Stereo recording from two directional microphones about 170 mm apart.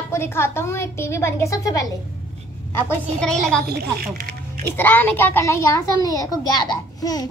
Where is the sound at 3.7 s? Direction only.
65° right (ahead or behind).